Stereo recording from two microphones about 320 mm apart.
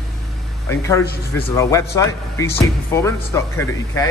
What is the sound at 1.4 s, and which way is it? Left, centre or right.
A man's voice, centre.